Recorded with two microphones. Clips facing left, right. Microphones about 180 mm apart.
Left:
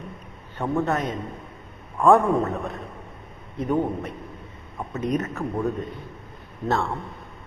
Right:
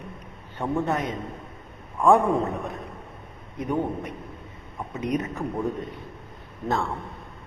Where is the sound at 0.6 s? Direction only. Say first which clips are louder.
Left 2 dB; 15° right (ahead or behind).